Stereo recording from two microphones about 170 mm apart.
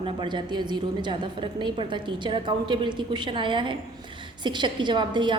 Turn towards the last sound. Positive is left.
turn(degrees=-25)  # may be behind; listen again after turning